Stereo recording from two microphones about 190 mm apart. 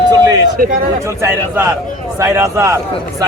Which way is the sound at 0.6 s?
50° right (ahead or behind).